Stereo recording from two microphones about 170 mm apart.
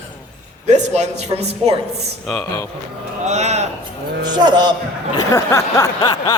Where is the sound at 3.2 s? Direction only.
40° right (ahead or behind).